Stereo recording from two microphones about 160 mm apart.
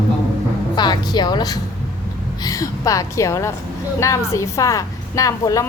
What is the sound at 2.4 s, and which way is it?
Speech, 25° left (ahead or behind).